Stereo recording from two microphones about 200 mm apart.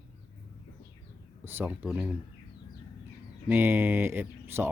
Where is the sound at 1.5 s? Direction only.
10° right (ahead or behind).